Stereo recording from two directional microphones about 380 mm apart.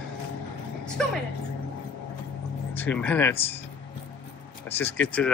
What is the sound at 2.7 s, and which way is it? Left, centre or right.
Speech, centre.